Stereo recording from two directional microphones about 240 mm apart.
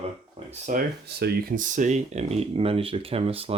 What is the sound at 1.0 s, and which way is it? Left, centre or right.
Speech, right.